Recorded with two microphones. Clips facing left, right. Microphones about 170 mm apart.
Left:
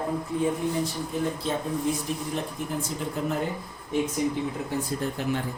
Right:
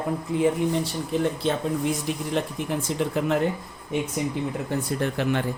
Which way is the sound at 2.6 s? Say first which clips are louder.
Right 4 dB; 90° right.